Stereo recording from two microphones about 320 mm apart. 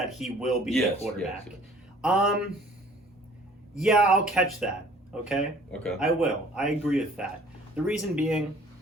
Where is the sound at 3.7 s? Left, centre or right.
Centre.